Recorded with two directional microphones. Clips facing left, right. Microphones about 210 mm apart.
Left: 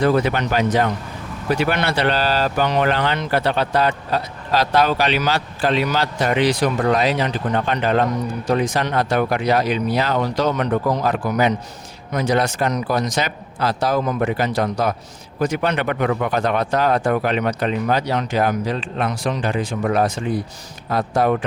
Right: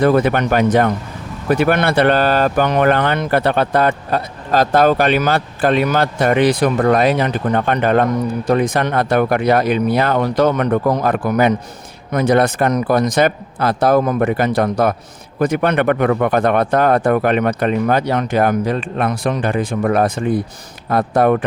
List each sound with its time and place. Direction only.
0.0 s speech: 55° right (ahead or behind)